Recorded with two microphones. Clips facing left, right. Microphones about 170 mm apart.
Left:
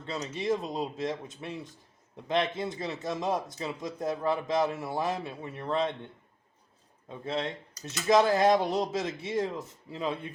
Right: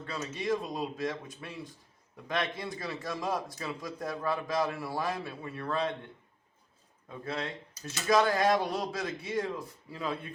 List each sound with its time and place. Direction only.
0.0 s a man's voice: 25° left (ahead or behind)
7.1 s a man's voice: 25° left (ahead or behind)